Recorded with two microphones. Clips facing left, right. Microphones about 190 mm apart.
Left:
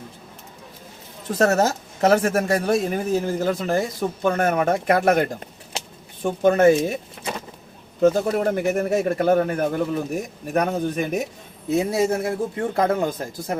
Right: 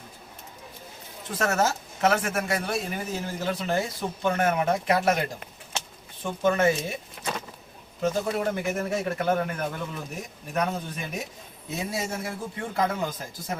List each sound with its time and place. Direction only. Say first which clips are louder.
1.3 s a woman's voice: left 6 dB; 40° left (ahead or behind)
8.0 s a woman's voice: left 8 dB; 40° left (ahead or behind)